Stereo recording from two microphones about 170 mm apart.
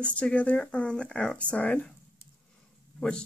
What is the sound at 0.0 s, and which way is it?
Speech, 10° left (ahead or behind).